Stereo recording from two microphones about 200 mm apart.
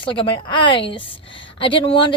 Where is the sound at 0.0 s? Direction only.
25° left (ahead or behind).